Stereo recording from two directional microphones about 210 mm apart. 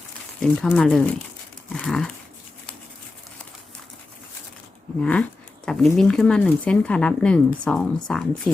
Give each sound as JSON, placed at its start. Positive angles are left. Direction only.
{"t": 0.6, "sound": "speech", "side_deg": 5}
{"t": 1.7, "sound": "dog", "side_deg": 0}
{"t": 5.0, "sound": "speech", "side_deg": 5}